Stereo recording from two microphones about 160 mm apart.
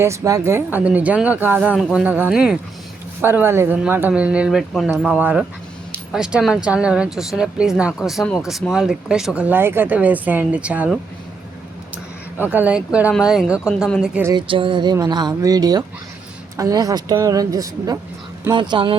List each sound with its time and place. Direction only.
0.0 s speech: 20° right (ahead or behind)
12.4 s speech: 10° right (ahead or behind)
14.3 s a woman's voice: 30° right (ahead or behind)